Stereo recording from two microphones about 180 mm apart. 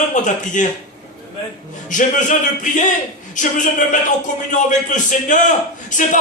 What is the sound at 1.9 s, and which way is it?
A man's voice, 45° left (ahead or behind).